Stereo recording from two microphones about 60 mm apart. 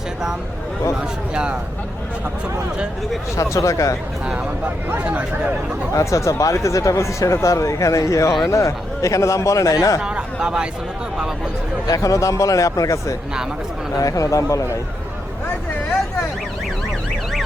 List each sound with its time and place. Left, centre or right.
1.3 s speech: centre
3.3 s speech: left
4.9 s speech: right
5.9 s speech: left
10.0 s speech: centre
11.9 s speech: left